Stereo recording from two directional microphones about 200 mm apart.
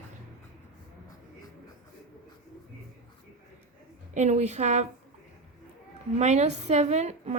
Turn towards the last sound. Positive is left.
turn(degrees=-35)  # may be behind; listen again after turning